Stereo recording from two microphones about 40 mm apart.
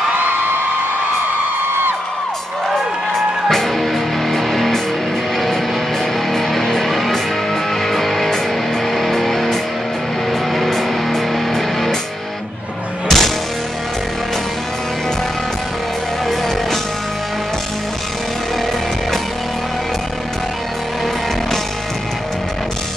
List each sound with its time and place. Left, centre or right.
3.4 s music: centre
6.3 s music: centre
13.1 s music: centre
16.3 s music: centre